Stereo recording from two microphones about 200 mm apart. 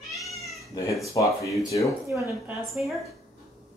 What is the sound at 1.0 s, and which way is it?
Speech, 15° left (ahead or behind).